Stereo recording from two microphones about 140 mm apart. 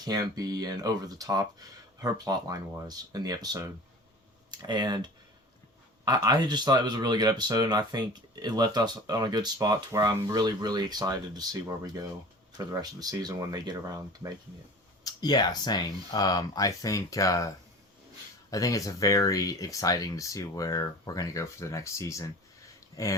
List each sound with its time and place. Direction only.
0.0 s speech: 30° right (ahead or behind)
15.0 s speech: 30° left (ahead or behind)
18.5 s speech: 25° left (ahead or behind)